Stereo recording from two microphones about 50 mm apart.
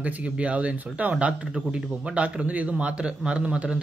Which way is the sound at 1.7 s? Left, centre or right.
Right.